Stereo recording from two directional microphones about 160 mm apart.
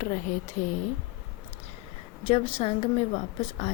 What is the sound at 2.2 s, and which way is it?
Speech, 40° left (ahead or behind).